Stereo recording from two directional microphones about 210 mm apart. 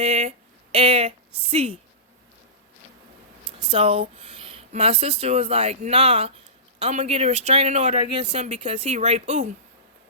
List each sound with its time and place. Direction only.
0.0 s a woman's voice: 30° right (ahead or behind)
3.7 s speech: 30° right (ahead or behind)